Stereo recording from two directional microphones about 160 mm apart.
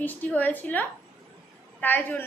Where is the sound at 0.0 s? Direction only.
10° left (ahead or behind).